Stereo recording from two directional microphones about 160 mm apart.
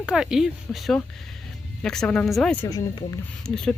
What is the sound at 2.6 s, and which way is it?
Speech, 25° left (ahead or behind).